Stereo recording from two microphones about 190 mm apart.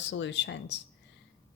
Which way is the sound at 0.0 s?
70° left (ahead or behind).